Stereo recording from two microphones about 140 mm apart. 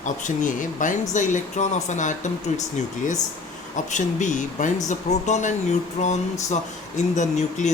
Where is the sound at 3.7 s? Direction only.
60° left (ahead or behind).